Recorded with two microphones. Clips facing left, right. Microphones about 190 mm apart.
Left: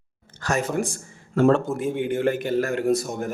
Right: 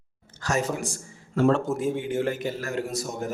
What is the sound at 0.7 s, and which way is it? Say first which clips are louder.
Speech: left 6 dB; 55° left (ahead or behind).